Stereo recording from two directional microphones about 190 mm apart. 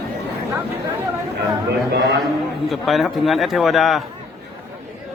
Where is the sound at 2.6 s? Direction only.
Centre (ahead or behind).